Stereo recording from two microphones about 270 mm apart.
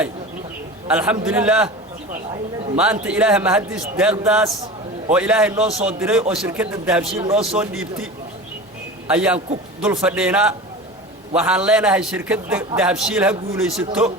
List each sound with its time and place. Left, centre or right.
0.9 s a man's voice: centre
2.7 s a man's voice: centre
9.0 s a man's voice: centre